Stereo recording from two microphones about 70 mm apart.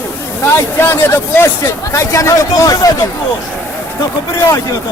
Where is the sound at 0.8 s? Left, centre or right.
Left.